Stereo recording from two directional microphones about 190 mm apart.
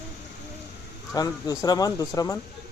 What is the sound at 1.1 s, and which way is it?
Speech, 20° left (ahead or behind).